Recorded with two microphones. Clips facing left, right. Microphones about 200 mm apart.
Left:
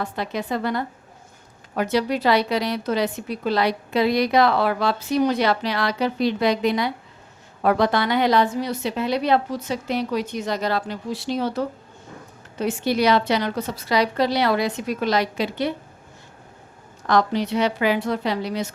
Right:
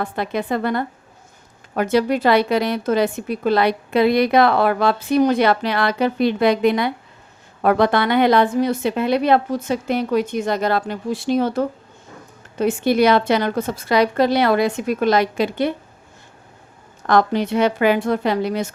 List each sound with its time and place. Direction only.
0.0 s a woman's voice: 55° right (ahead or behind)
17.1 s a woman's voice: 55° right (ahead or behind)